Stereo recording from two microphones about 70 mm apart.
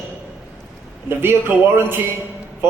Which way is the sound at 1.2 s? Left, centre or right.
Right.